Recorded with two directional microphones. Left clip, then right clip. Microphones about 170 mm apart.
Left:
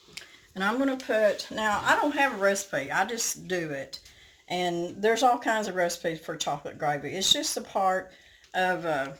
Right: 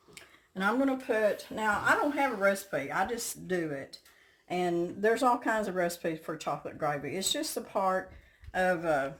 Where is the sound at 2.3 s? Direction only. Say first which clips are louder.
Left 3 dB; 35° right (ahead or behind).